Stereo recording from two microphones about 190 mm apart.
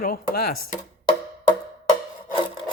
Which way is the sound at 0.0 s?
55° left (ahead or behind).